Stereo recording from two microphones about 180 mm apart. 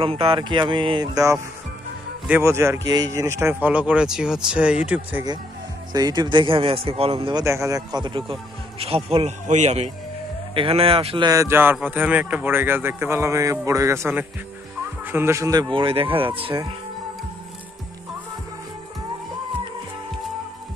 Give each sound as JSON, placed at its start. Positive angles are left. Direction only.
{"t": 0.0, "sound": "speech", "side_deg": -30}
{"t": 5.9, "sound": "speech", "side_deg": -20}
{"t": 7.4, "sound": "a man's voice", "side_deg": -15}
{"t": 11.2, "sound": "speech", "side_deg": -15}